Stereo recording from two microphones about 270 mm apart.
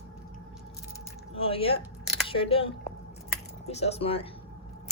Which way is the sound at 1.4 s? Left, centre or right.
Left.